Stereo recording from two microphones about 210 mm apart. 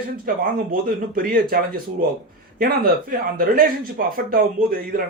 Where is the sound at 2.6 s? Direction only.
45° right (ahead or behind).